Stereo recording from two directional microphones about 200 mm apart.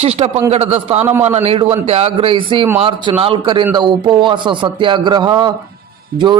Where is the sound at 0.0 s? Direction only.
30° right (ahead or behind).